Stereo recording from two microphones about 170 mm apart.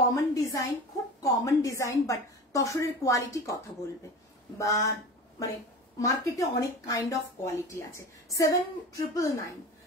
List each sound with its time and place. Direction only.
0.1 s a sound: 20° left (ahead or behind)
1.2 s a woman's voice: 20° left (ahead or behind)
4.6 s a woman's voice: 20° left (ahead or behind)
5.9 s a woman's voice: 20° left (ahead or behind)